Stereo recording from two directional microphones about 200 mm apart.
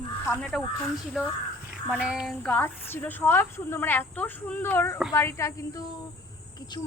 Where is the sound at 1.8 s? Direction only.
5° right (ahead or behind).